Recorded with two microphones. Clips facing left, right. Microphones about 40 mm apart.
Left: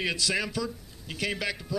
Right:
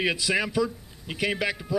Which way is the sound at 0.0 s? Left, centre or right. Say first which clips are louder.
Right 4 dB; centre.